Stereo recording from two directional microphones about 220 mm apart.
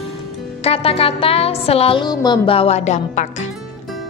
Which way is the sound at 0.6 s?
25° left (ahead or behind).